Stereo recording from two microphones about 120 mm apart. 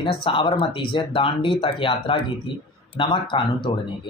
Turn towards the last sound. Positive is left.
turn(degrees=45)  # may be behind; listen again after turning